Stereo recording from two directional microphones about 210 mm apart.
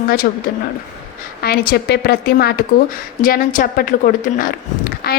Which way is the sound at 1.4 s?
45° left (ahead or behind).